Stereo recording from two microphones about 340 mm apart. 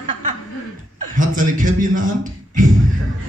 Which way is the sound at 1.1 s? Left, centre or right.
Right.